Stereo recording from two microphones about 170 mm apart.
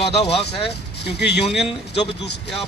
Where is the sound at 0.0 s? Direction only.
35° left (ahead or behind).